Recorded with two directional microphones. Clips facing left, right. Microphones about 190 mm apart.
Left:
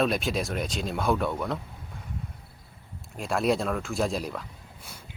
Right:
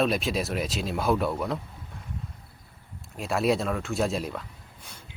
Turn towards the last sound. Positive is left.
turn(degrees=0)  # may be behind; listen again after turning